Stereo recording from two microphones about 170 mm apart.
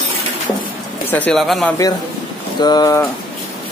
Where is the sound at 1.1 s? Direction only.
5° left (ahead or behind).